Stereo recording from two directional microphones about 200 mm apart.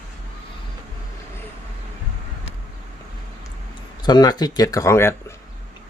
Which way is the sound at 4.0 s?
20° left (ahead or behind).